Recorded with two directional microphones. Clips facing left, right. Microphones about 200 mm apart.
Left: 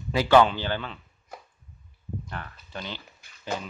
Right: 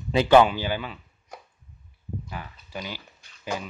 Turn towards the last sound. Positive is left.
turn(degrees=-10)  # may be behind; listen again after turning